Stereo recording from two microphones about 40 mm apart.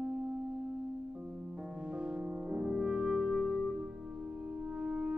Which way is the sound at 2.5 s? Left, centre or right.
Right.